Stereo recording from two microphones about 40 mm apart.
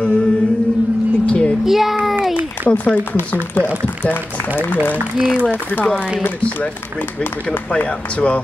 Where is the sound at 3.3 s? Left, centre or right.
Left.